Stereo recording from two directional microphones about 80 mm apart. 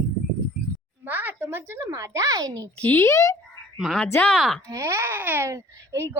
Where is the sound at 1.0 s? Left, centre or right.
Right.